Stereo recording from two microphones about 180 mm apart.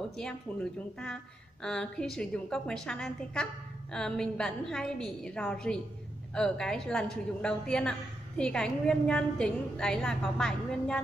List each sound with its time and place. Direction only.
0.2 s a woman's voice: 5° left (ahead or behind)